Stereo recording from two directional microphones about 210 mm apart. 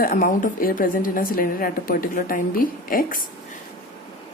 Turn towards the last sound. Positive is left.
turn(degrees=40)  # may be behind; listen again after turning